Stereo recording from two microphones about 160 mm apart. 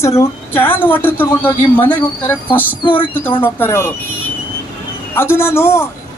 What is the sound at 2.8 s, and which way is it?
Speech, 30° left (ahead or behind).